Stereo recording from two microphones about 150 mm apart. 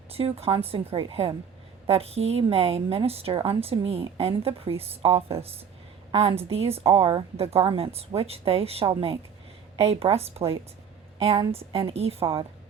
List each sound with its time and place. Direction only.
0.1 s a woman's voice: 40° right (ahead or behind)